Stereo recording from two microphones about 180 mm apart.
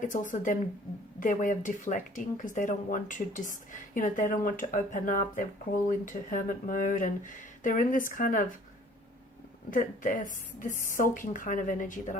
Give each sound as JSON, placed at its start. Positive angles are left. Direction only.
{"t": 0.0, "sound": "speech", "side_deg": 45}
{"t": 9.6, "sound": "speech", "side_deg": 50}